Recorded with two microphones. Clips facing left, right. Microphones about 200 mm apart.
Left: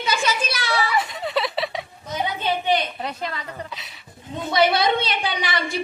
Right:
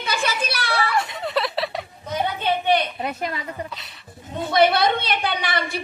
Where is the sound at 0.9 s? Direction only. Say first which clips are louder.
Even; centre (ahead or behind).